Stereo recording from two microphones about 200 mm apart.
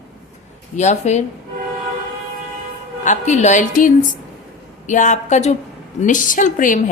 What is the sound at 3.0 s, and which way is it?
A woman's voice, 35° left (ahead or behind).